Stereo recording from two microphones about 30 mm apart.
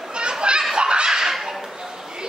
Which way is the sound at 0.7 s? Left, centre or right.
Right.